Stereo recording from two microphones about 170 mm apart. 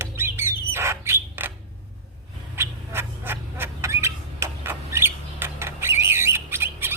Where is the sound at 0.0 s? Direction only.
15° right (ahead or behind).